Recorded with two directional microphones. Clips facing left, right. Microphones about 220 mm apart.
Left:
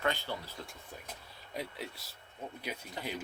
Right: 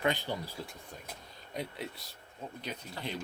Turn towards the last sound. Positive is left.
turn(degrees=10)  # may be behind; listen again after turning